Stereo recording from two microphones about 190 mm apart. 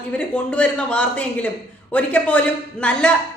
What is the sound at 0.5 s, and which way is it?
A woman's voice, 5° left (ahead or behind).